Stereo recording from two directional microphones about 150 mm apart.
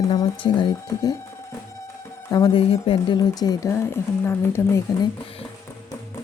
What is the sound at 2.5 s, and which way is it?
Speech, 40° left (ahead or behind).